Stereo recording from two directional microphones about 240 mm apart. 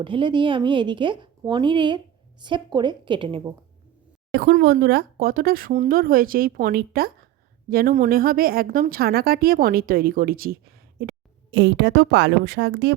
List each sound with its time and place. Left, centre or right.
0.0 s a woman's voice: right
4.3 s a woman's voice: right